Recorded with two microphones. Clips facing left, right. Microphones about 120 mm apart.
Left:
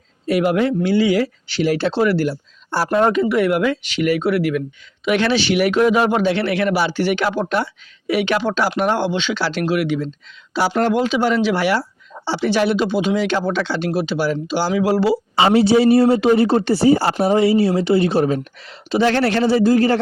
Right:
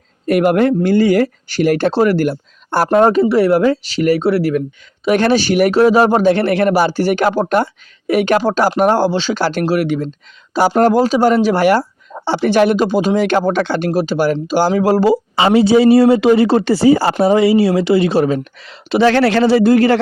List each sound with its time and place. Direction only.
0.3 s a man's voice: 55° right (ahead or behind)
3.0 s a man's voice: 35° right (ahead or behind)
15.9 s speech: 90° right